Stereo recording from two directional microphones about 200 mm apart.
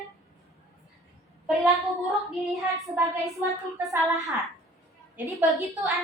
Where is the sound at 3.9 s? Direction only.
15° right (ahead or behind).